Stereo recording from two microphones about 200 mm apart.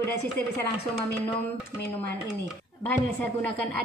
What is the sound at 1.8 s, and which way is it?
Speech, 10° left (ahead or behind).